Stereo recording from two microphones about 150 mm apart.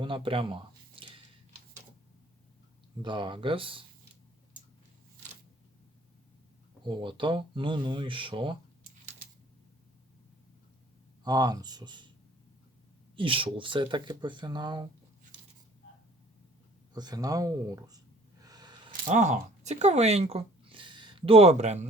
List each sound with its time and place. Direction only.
0.0 s a sound: 35° right (ahead or behind)
3.0 s speech: 30° right (ahead or behind)
6.8 s speech: 30° right (ahead or behind)
11.2 s speech: 25° right (ahead or behind)
13.1 s speech: 35° right (ahead or behind)
16.9 s a sound: 25° right (ahead or behind)
19.0 s speech: 55° right (ahead or behind)